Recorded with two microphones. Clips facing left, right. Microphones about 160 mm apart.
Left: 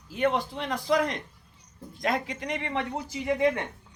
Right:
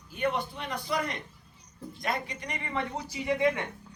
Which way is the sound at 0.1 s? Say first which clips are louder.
Left 4 dB; 90° left.